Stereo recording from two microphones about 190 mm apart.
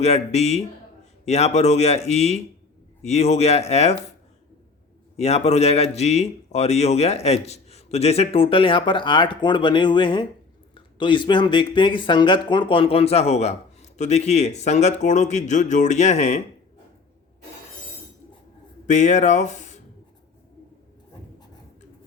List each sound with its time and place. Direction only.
0.0 s speech: 35° left (ahead or behind)
5.1 s speech: 35° left (ahead or behind)
18.9 s speech: 40° left (ahead or behind)